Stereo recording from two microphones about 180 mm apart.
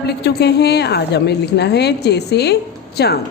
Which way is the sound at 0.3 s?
65° left (ahead or behind).